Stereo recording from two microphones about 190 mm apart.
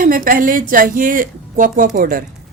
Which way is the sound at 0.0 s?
45° right (ahead or behind).